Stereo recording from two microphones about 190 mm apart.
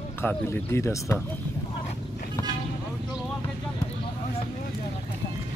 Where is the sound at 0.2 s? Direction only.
10° left (ahead or behind).